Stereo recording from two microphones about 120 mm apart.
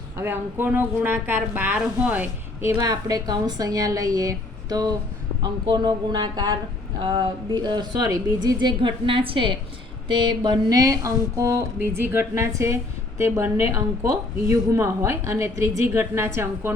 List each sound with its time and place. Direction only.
0.2 s speech: 15° right (ahead or behind)
2.7 s a woman's voice: 30° right (ahead or behind)